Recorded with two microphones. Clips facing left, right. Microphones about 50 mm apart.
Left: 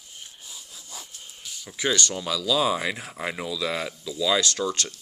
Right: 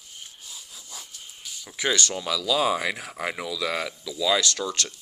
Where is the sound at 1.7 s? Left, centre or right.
Centre.